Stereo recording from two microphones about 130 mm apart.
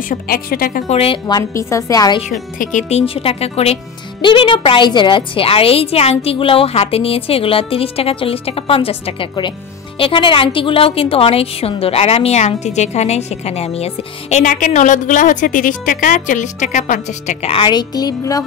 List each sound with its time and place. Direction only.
0.9 s speech: 45° left (ahead or behind)
1.2 s a woman's voice: 25° left (ahead or behind)
2.2 s speech: 70° left (ahead or behind)
14.4 s a woman's voice: 80° left
17.5 s speech: 40° left (ahead or behind)